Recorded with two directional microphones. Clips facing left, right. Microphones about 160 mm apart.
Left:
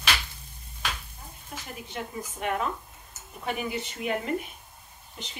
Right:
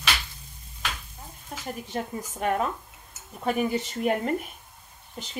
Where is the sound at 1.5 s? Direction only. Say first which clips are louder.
Right 6 dB; 45° right (ahead or behind).